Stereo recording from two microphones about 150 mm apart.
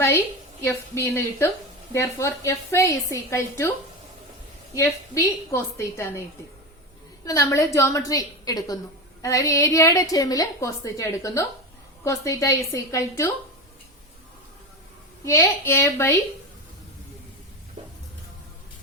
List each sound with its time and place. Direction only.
0.6 s a woman's voice: 20° left (ahead or behind)
4.7 s a woman's voice: 20° left (ahead or behind)
7.3 s a woman's voice: 20° left (ahead or behind)
15.2 s a woman's voice: 20° left (ahead or behind)